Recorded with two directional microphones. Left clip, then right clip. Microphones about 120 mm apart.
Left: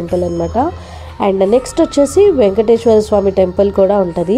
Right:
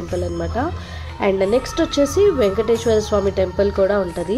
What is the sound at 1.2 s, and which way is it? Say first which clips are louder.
A woman's voice: left 6 dB; 30° left (ahead or behind).